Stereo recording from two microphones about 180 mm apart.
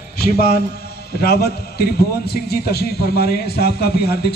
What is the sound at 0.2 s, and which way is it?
A man's voice, 60° left (ahead or behind).